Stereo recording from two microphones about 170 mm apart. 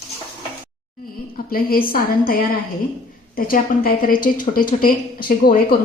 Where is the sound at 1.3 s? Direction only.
60° left (ahead or behind).